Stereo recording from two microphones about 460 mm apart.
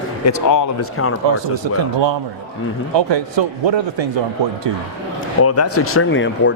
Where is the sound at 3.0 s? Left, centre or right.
Right.